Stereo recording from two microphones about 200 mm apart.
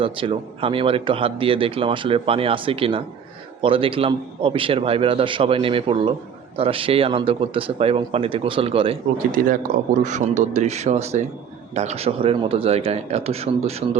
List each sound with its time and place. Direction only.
0.0 s speech: 25° right (ahead or behind)
9.3 s a man's voice: 40° right (ahead or behind)